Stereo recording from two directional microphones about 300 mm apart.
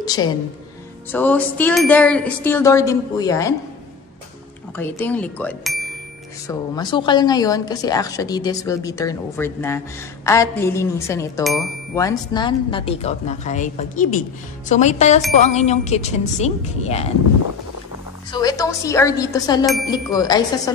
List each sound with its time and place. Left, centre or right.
0.0 s a woman's voice: centre
4.7 s speech: centre
6.4 s a woman's voice: centre
12.0 s a woman's voice: centre
18.3 s a woman's voice: centre
19.6 s speech: centre
19.9 s a woman's voice: centre